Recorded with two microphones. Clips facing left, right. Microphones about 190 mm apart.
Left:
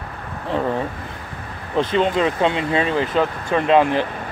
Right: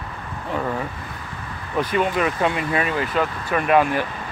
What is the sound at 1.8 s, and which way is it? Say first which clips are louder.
Speech: left 3 dB; 25° left (ahead or behind).